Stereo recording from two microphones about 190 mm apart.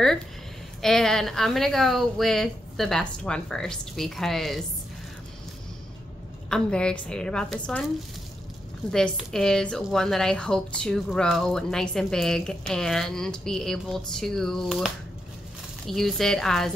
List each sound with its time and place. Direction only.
0.8 s a woman's voice: centre (ahead or behind)
6.5 s a woman's voice: 5° left (ahead or behind)
8.9 s a woman's voice: 5° left (ahead or behind)
15.9 s a woman's voice: centre (ahead or behind)